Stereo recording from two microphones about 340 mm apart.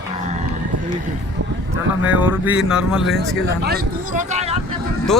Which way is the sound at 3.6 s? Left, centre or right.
Right.